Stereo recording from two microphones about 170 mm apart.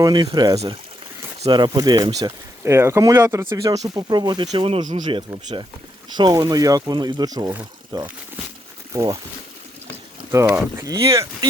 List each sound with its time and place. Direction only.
0.0 s speech: 25° right (ahead or behind)
10.3 s speech: 15° right (ahead or behind)